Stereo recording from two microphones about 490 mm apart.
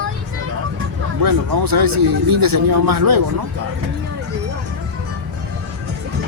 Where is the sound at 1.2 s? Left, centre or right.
Right.